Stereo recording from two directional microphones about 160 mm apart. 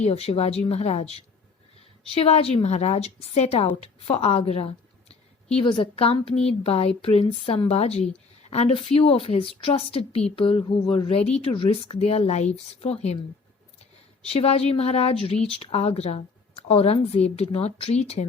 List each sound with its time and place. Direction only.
0.0 s a woman's voice: 40° left (ahead or behind)
14.3 s a woman's voice: 40° left (ahead or behind)